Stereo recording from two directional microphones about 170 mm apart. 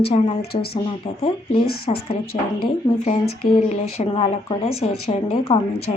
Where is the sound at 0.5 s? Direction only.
65° left (ahead or behind).